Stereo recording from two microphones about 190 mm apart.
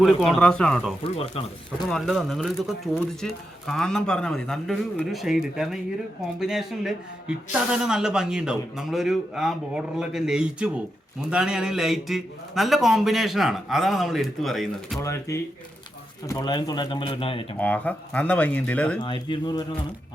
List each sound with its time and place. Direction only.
0.0 s speech: centre (ahead or behind)
1.0 s speech: 30° left (ahead or behind)
1.9 s speech: centre (ahead or behind)
15.0 s speech: 15° left (ahead or behind)
17.6 s speech: 10° left (ahead or behind)
18.9 s speech: 25° left (ahead or behind)